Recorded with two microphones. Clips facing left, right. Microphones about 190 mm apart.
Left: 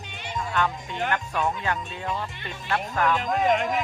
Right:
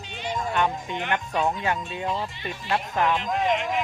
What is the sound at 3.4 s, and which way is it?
Speech, 45° left (ahead or behind).